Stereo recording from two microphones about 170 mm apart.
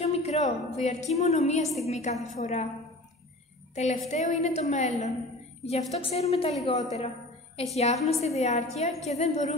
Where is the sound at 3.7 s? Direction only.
40° left (ahead or behind).